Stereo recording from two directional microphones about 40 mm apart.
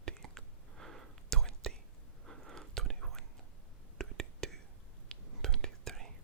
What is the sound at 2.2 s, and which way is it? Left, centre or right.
Chewing, centre.